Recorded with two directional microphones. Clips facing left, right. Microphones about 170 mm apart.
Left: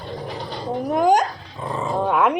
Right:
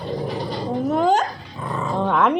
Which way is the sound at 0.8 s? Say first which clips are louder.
Left 2 dB; 15° left (ahead or behind).